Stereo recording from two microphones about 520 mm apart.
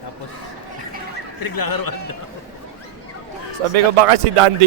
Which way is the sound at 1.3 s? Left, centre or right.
Left.